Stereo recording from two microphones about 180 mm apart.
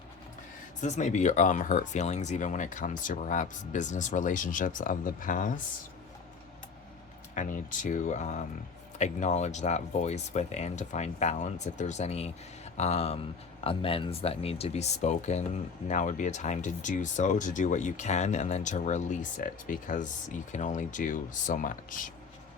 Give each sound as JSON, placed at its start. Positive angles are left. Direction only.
{"t": 0.8, "sound": "speech", "side_deg": 40}
{"t": 7.3, "sound": "speech", "side_deg": 45}